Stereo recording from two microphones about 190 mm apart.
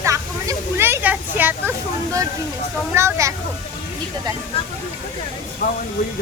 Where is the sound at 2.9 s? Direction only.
15° right (ahead or behind).